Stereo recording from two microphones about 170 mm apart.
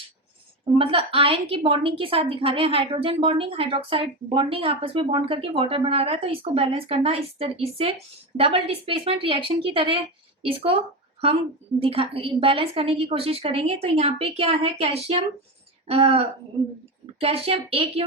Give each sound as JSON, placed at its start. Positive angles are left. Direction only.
{"t": 0.8, "sound": "a woman's voice", "side_deg": -30}
{"t": 11.8, "sound": "a woman's voice", "side_deg": -35}